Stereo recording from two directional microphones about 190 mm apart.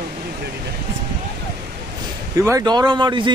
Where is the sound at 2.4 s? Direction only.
15° right (ahead or behind).